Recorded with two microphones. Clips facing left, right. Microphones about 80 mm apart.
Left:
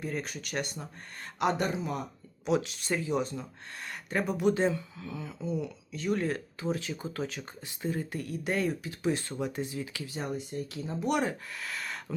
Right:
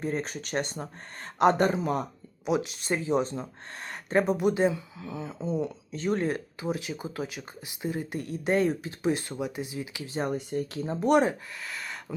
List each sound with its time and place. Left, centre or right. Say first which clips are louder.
0.0 s speech: right 4 dB; right
2.6 s speech: right 2 dB; right
6.2 s speech: right 2 dB; centre
9.4 s speech: right 1 dB; centre
10.1 s speech: right 9 dB; right
11.6 s speech: even; centre